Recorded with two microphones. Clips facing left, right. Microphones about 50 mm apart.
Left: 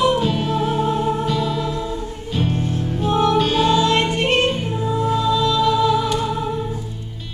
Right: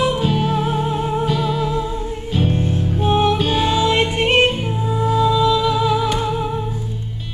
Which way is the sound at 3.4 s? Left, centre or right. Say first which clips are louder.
Left 2 dB; centre.